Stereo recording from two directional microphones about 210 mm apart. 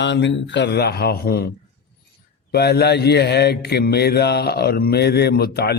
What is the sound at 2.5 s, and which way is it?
Speech, 50° left (ahead or behind).